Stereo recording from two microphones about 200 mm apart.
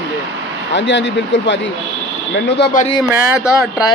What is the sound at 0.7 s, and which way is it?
Speech, 65° left (ahead or behind).